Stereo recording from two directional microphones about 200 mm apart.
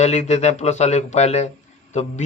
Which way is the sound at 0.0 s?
35° left (ahead or behind).